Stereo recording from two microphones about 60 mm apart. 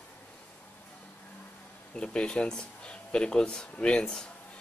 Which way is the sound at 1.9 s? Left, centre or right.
Centre.